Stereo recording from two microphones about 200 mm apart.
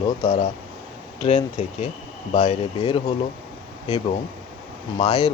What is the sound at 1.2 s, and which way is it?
Speech, 30° left (ahead or behind).